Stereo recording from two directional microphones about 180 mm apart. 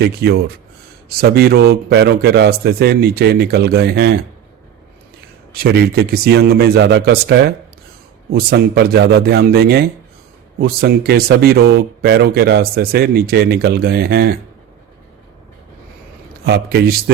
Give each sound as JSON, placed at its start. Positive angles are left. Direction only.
{"t": 0.0, "sound": "speech", "side_deg": -60}
{"t": 5.5, "sound": "speech", "side_deg": -60}
{"t": 16.4, "sound": "speech", "side_deg": -60}